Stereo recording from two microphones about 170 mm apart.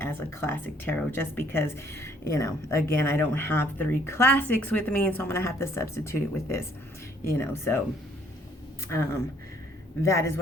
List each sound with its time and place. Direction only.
0.0 s speech: 15° left (ahead or behind)
8.9 s speech: 15° left (ahead or behind)